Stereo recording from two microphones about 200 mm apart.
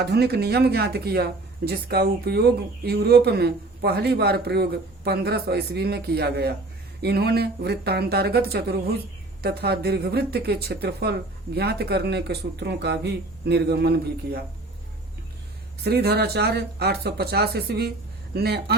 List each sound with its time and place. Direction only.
0.0 s speech: 55° right (ahead or behind)
15.8 s speech: 55° right (ahead or behind)